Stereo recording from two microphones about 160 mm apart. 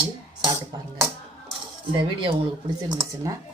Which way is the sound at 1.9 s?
30° right (ahead or behind).